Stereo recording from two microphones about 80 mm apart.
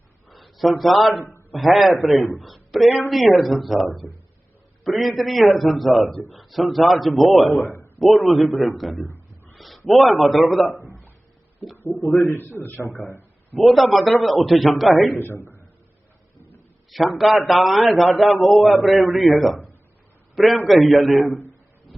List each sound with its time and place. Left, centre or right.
0.3 s a man's voice: centre
1.2 s a sound: left
1.5 s a man's voice: centre
11.9 s a man's voice: centre
12.1 s a man's voice: left
13.6 s a man's voice: centre
15.2 s a man's voice: left
16.9 s a man's voice: centre